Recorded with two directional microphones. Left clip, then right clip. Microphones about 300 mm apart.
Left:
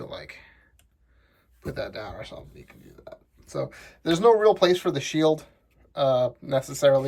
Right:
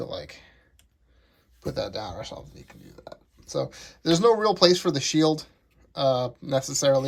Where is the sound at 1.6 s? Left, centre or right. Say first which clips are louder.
Right 2 dB; centre.